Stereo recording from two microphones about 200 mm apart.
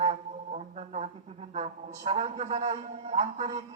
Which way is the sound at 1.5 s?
35° right (ahead or behind).